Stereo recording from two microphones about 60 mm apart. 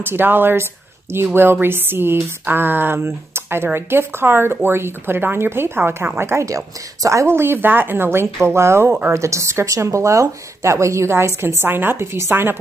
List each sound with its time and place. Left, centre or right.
0.0 s speech: right
6.4 s speech: right
7.2 s speech: right